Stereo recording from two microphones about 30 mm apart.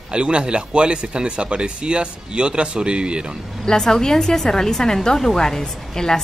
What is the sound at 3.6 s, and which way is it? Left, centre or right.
A woman's voice, left.